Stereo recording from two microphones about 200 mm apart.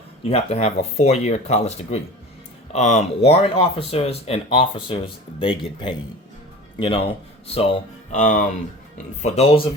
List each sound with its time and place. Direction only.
0.3 s speech: 30° left (ahead or behind)
8.1 s speech: 40° left (ahead or behind)